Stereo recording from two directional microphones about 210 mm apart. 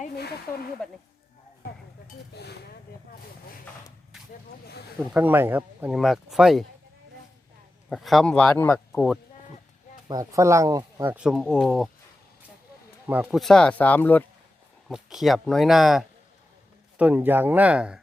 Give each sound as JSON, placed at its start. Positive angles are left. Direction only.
{"t": 0.8, "sound": "speech", "side_deg": 5}
{"t": 2.3, "sound": "dishes", "side_deg": 50}
{"t": 5.1, "sound": "speech", "side_deg": -10}
{"t": 7.9, "sound": "speech", "side_deg": 0}
{"t": 10.1, "sound": "speech", "side_deg": -15}
{"t": 13.1, "sound": "speech", "side_deg": -5}